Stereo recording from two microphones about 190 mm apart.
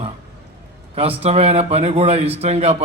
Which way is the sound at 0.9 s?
30° right (ahead or behind).